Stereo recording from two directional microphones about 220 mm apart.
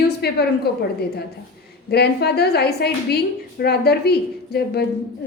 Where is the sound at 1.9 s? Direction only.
45° left (ahead or behind).